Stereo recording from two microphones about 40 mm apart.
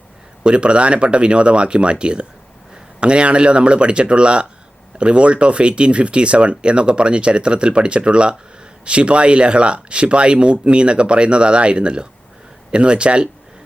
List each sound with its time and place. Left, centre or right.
0.4 s speech: right